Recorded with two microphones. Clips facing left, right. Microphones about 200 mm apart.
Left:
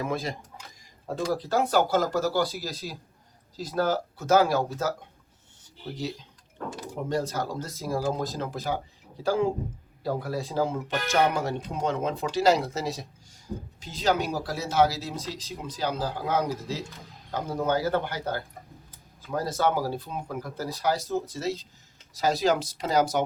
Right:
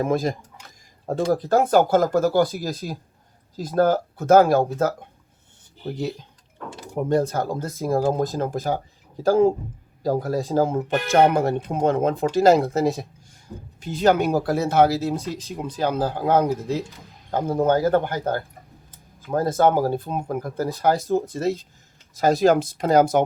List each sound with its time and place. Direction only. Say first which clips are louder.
0.0 s speech: right 8 dB; 50° right (ahead or behind)